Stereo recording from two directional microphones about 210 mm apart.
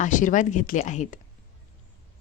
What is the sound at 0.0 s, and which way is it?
Speech, 40° left (ahead or behind).